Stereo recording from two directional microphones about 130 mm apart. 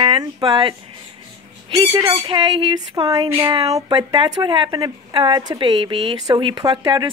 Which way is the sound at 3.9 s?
40° right (ahead or behind).